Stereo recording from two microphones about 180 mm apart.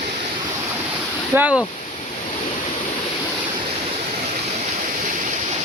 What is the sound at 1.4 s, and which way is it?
Speech, 5° right (ahead or behind).